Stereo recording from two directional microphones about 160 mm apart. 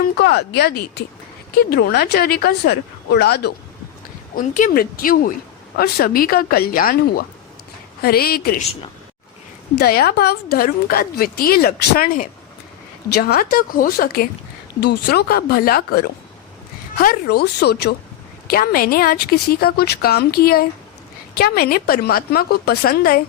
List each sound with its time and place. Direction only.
0.0 s speech: 85° left
1.5 s a woman's voice: 80° left
4.4 s a woman's voice: 55° left (ahead or behind)
9.7 s a woman's voice: 75° left (ahead or behind)
13.1 s a woman's voice: 80° left
14.8 s a woman's voice: 90° left
18.5 s a woman's voice: 65° left (ahead or behind)